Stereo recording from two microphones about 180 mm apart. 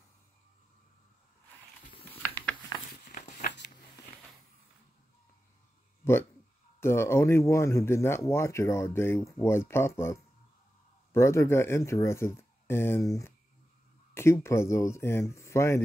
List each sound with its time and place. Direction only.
2.7 s a sound: 25° left (ahead or behind)
3.1 s walk: 40° left (ahead or behind)
6.8 s speech: 15° left (ahead or behind)